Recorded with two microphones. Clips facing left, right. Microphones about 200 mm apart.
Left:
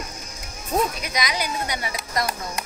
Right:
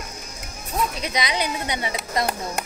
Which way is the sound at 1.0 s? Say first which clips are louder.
Right 2 dB; 25° right (ahead or behind).